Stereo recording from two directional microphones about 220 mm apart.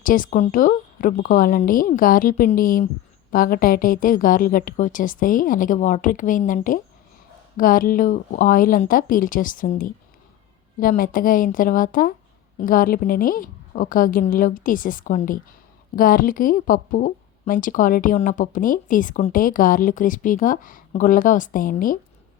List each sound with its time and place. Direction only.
0.0 s a woman's voice: 40° left (ahead or behind)